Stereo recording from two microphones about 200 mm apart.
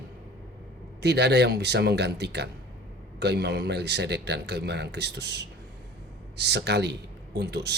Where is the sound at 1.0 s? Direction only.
55° right (ahead or behind).